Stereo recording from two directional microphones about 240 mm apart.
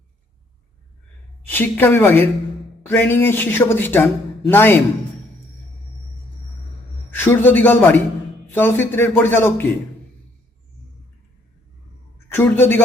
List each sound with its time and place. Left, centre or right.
1.5 s a man's voice: centre
7.2 s a man's voice: centre
12.3 s a man's voice: centre